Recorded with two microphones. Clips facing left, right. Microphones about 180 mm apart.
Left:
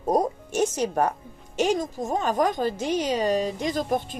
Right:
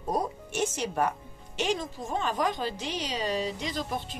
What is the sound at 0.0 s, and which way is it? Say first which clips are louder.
Music: left 7 dB; 45° left (ahead or behind).